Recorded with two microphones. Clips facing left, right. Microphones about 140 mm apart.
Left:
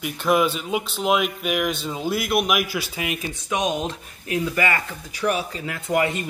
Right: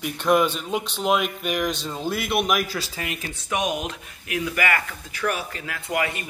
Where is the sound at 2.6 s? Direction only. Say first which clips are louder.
Left 2 dB; 15° left (ahead or behind).